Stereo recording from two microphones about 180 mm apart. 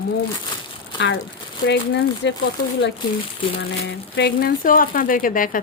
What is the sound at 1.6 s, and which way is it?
Speech, 75° left (ahead or behind).